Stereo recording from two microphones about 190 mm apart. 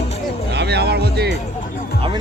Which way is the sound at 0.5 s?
60° right (ahead or behind).